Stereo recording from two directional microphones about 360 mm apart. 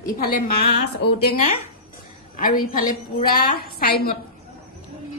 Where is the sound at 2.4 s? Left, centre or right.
Left.